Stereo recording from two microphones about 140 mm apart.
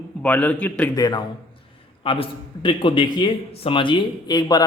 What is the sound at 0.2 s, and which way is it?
Speech, 10° left (ahead or behind).